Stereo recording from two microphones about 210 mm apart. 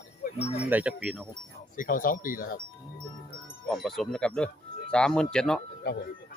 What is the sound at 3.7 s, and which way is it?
A man's voice, centre (ahead or behind).